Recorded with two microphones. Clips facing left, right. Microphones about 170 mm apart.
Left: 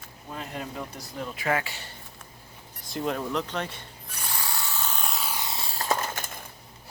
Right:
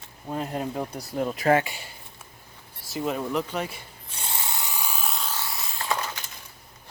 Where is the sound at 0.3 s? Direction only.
40° right (ahead or behind).